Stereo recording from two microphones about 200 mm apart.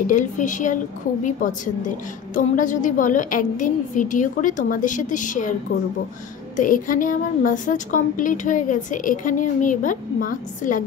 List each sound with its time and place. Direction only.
0.0 s a woman's voice: 40° left (ahead or behind)
2.3 s a woman's voice: 40° left (ahead or behind)